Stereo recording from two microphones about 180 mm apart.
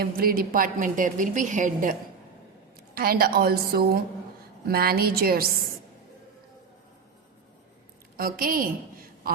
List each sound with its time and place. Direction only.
0.0 s a woman's voice: 55° right (ahead or behind)
8.1 s a woman's voice: 55° right (ahead or behind)